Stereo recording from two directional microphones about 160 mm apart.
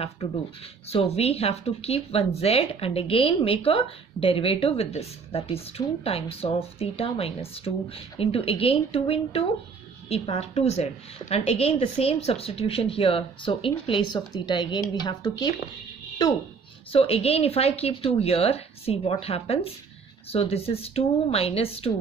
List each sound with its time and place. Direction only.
0.8 s speech: 40° left (ahead or behind)
16.9 s speech: 35° left (ahead or behind)